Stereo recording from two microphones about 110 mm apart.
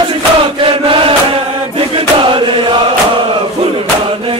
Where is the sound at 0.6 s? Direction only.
55° right (ahead or behind).